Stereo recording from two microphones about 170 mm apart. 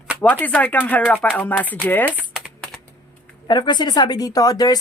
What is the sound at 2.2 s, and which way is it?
Typing, 5° right (ahead or behind).